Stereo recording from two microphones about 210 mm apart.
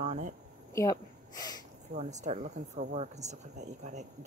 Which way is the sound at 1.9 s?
35° right (ahead or behind).